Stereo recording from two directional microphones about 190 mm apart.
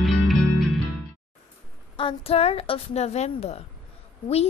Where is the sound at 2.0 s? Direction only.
30° left (ahead or behind).